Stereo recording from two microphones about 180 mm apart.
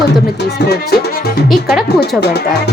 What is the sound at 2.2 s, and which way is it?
Speech, 65° left (ahead or behind).